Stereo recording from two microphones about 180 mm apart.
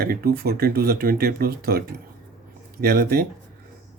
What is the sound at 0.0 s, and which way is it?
Speech, 55° right (ahead or behind).